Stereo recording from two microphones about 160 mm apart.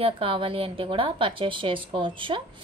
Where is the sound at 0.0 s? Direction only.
35° right (ahead or behind).